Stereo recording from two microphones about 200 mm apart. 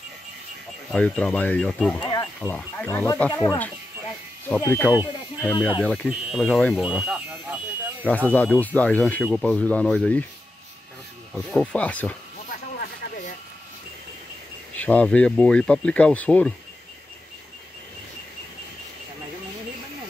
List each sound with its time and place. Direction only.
0.9 s speech: 5° left (ahead or behind)
4.8 s speech: 10° right (ahead or behind)
8.0 s speech: 10° left (ahead or behind)
11.3 s speech: 5° left (ahead or behind)
12.4 s a sound: 45° left (ahead or behind)
14.8 s speech: 5° left (ahead or behind)